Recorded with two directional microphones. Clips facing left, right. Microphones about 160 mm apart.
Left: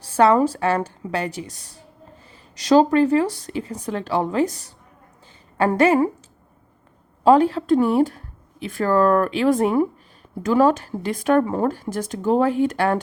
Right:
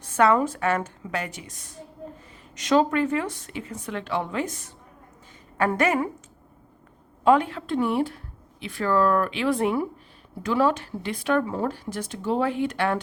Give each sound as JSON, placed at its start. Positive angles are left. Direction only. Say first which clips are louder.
{"t": 0.0, "sound": "speech", "louder": "left 4 dB", "side_deg": 30}
{"t": 7.3, "sound": "speech", "louder": "left 6 dB", "side_deg": 35}